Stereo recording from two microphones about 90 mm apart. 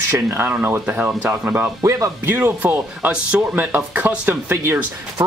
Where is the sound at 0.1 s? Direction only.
20° right (ahead or behind).